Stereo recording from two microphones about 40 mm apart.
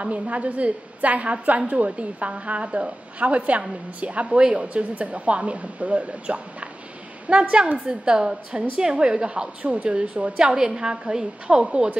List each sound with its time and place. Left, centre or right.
0.0 s a woman's voice: right